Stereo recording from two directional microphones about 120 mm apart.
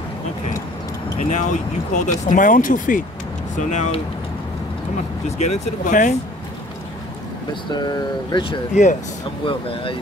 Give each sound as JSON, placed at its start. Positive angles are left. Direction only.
{"t": 1.3, "sound": "speech", "side_deg": 85}
{"t": 5.4, "sound": "speech", "side_deg": 90}
{"t": 7.7, "sound": "speech", "side_deg": 35}
{"t": 8.8, "sound": "speech", "side_deg": 75}
{"t": 9.5, "sound": "speech", "side_deg": 50}